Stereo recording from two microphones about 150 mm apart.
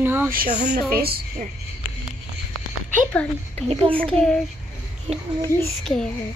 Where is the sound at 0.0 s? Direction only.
15° right (ahead or behind).